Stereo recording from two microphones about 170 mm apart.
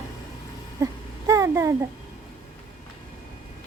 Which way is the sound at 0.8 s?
20° right (ahead or behind).